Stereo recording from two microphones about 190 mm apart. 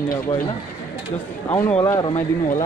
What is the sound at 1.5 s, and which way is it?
Speech, 10° left (ahead or behind).